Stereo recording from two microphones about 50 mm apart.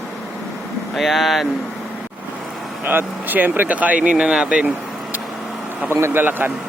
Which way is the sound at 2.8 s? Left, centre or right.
Right.